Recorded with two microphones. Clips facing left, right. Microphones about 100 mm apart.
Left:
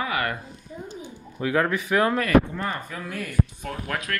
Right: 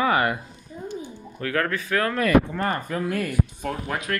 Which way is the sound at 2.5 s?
50° right (ahead or behind).